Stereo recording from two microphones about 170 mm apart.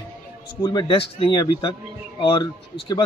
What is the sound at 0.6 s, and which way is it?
Speech, 25° left (ahead or behind).